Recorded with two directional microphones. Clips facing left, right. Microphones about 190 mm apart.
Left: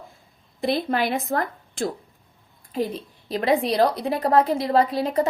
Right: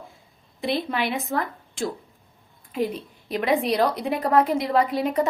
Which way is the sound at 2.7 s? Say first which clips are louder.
Even; 35° left (ahead or behind).